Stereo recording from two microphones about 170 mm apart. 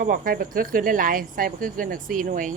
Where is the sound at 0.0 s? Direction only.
55° right (ahead or behind).